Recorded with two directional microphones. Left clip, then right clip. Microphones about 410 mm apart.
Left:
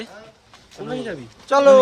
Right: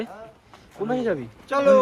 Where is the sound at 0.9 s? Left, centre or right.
Centre.